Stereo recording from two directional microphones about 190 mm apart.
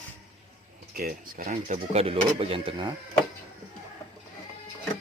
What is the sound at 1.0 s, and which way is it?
Speech, 50° right (ahead or behind).